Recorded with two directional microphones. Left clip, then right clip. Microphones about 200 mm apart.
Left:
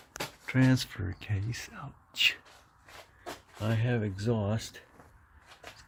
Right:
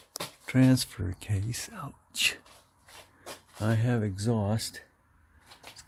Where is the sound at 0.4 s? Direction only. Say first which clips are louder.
Right 3 dB; 15° right (ahead or behind).